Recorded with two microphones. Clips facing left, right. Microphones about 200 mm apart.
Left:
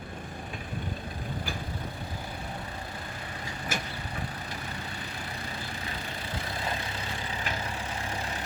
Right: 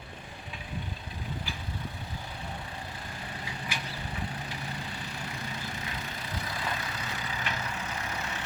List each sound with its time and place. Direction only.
3.7 s vehicle: 45° left (ahead or behind)
6.5 s vehicle: 30° left (ahead or behind)